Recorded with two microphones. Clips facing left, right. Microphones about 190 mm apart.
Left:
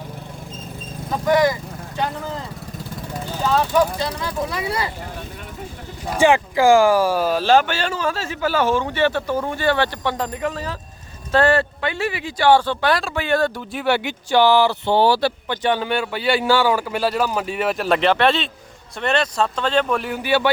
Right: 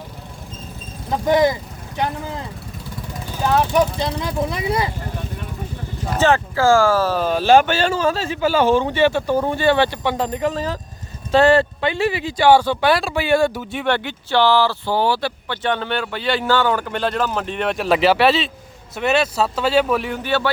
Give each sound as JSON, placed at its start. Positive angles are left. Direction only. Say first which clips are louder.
{"t": 1.3, "sound": "speech", "louder": "right 1 dB", "side_deg": -20}
{"t": 3.4, "sound": "speech", "louder": "right 1 dB", "side_deg": -15}
{"t": 6.1, "sound": "speech", "louder": "left 1 dB", "side_deg": 15}
{"t": 7.4, "sound": "speech", "louder": "right 4 dB", "side_deg": -15}
{"t": 7.7, "sound": "speech", "louder": "right 5 dB", "side_deg": -30}
{"t": 8.6, "sound": "speech", "louder": "right 4 dB", "side_deg": -30}
{"t": 9.0, "sound": "speech", "louder": "right 3 dB", "side_deg": -15}
{"t": 9.3, "sound": "speech", "louder": "right 3 dB", "side_deg": -30}
{"t": 12.4, "sound": "speech", "louder": "right 2 dB", "side_deg": -10}
{"t": 13.7, "sound": "speech", "louder": "even", "side_deg": 10}
{"t": 15.4, "sound": "speech", "louder": "left 2 dB", "side_deg": 10}